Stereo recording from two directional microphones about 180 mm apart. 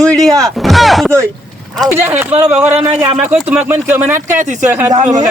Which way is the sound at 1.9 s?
15° right (ahead or behind).